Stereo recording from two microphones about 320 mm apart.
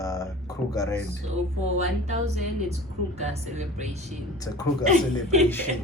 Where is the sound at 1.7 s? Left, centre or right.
Right.